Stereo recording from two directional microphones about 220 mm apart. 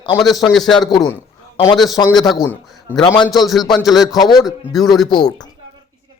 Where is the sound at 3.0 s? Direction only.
15° left (ahead or behind).